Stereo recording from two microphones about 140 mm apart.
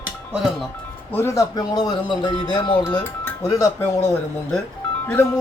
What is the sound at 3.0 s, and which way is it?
Speech, 20° left (ahead or behind).